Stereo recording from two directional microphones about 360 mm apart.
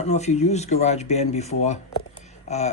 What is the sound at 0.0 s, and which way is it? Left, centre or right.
Speech, centre.